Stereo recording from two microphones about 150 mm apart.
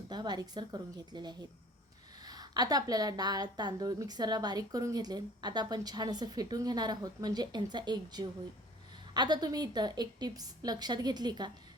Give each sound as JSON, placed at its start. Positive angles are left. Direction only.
{"t": 0.1, "sound": "a woman's voice", "side_deg": -30}